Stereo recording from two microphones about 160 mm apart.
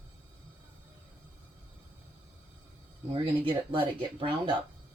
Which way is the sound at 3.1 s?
35° right (ahead or behind).